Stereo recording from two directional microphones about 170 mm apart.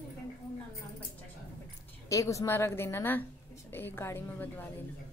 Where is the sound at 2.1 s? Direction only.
20° left (ahead or behind).